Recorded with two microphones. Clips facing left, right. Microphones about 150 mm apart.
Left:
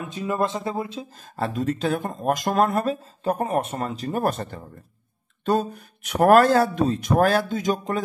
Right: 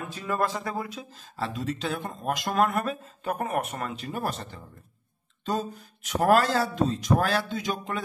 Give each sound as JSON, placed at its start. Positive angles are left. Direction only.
{"t": 0.0, "sound": "speech", "side_deg": 20}
{"t": 1.1, "sound": "speech", "side_deg": 50}